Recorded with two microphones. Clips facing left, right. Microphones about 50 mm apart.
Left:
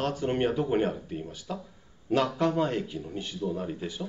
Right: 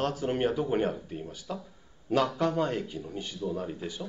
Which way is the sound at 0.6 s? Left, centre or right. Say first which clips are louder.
Left 1 dB; left.